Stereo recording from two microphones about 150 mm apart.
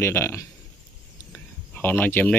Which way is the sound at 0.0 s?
15° left (ahead or behind).